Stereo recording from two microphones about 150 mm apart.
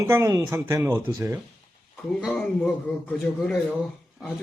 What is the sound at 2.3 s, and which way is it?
Speech, 5° left (ahead or behind).